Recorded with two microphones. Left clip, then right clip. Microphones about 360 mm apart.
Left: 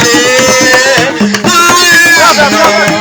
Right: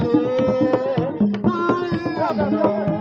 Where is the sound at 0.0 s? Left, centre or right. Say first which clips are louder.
Left 13 dB; right.